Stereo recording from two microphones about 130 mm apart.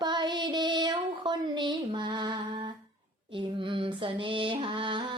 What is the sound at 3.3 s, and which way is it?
Mantra, 40° right (ahead or behind).